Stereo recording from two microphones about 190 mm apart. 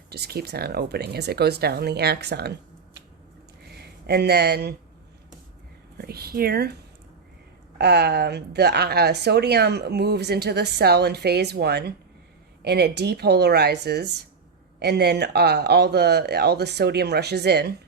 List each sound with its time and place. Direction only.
0.1 s a woman's voice: 55° right (ahead or behind)
3.8 s speech: 60° right (ahead or behind)
6.0 s a woman's voice: 55° right (ahead or behind)
7.8 s a woman's voice: 60° right (ahead or behind)